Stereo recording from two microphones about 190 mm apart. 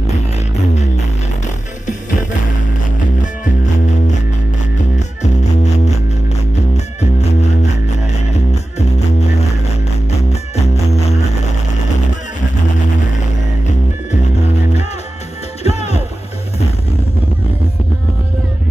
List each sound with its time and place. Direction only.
4.9 s music: 35° left (ahead or behind)
7.0 s music: 35° left (ahead or behind)
15.6 s music: 35° left (ahead or behind)